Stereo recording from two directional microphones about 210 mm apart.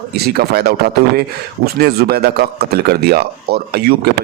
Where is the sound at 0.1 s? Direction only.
50° right (ahead or behind).